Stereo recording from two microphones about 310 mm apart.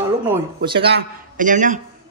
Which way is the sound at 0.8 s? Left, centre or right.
Right.